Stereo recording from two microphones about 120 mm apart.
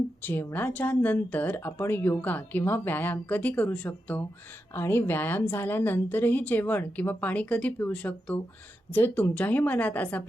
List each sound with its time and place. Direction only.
0.2 s speech: 15° left (ahead or behind)